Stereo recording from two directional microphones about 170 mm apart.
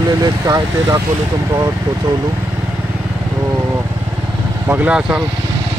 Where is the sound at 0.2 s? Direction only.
20° right (ahead or behind).